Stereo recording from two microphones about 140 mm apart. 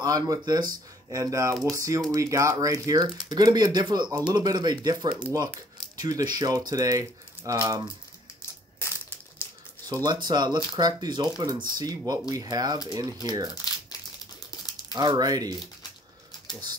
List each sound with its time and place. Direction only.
0.0 s speech: 25° right (ahead or behind)
9.8 s speech: 30° right (ahead or behind)
14.5 s a sound: 30° left (ahead or behind)
15.0 s speech: 30° right (ahead or behind)